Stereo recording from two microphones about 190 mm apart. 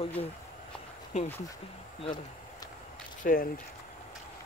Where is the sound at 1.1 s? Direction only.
35° left (ahead or behind).